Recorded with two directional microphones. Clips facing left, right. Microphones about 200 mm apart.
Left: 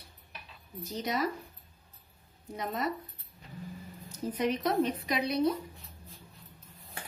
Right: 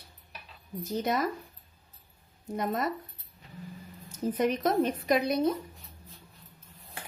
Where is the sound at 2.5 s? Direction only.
50° right (ahead or behind).